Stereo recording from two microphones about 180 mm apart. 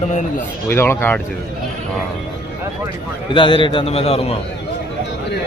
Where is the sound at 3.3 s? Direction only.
30° left (ahead or behind).